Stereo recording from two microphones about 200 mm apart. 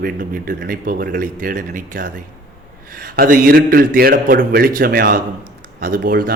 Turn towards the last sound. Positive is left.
turn(degrees=-45)  # may be behind; listen again after turning